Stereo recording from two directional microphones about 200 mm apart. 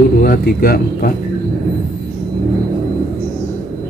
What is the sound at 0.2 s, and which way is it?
Speech, 45° left (ahead or behind).